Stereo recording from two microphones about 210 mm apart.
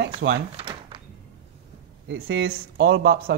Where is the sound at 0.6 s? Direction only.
20° right (ahead or behind).